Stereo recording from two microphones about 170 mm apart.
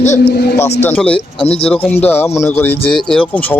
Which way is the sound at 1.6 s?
10° left (ahead or behind).